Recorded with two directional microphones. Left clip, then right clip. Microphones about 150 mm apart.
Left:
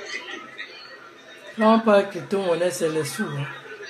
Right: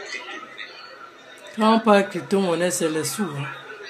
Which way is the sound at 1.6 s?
65° right (ahead or behind).